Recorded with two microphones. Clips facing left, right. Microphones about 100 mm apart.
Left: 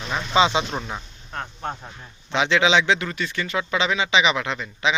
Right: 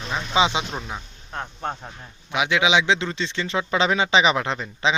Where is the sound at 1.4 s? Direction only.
10° right (ahead or behind).